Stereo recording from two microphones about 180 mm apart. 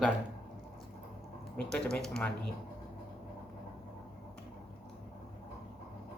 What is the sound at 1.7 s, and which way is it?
Speech, 5° left (ahead or behind).